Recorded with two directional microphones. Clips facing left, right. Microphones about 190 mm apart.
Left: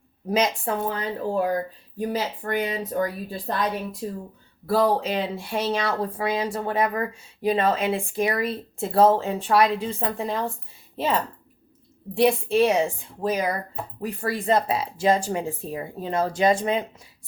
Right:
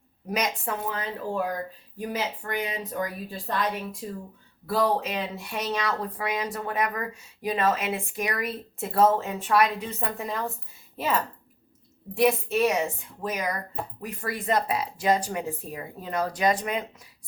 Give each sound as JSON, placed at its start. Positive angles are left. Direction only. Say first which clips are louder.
{"t": 0.3, "sound": "speech", "louder": "left 5 dB", "side_deg": 30}